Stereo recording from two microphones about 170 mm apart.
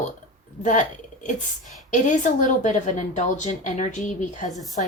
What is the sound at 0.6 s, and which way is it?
Speech, 45° left (ahead or behind).